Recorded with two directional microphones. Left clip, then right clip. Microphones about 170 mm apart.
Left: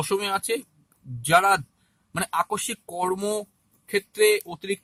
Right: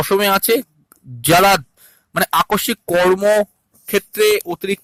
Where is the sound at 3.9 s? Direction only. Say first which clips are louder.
Right 6 dB; 45° right (ahead or behind).